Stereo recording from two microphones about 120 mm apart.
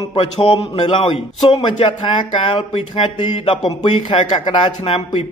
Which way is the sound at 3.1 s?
40° left (ahead or behind).